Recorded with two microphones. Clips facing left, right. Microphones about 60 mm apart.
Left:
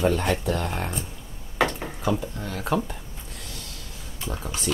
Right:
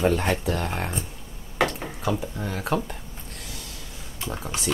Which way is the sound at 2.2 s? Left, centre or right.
Centre.